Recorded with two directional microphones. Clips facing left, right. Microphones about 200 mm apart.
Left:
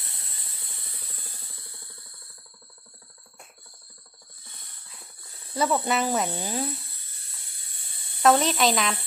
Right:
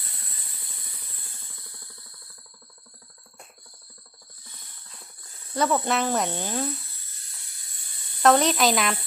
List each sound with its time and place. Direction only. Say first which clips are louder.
5.5 s speech: right 1 dB; centre (ahead or behind)
7.5 s a sound: left 1 dB; 30° left (ahead or behind)
8.2 s speech: right 1 dB; centre (ahead or behind)